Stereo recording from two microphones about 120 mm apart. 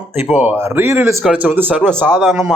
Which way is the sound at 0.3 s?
10° right (ahead or behind).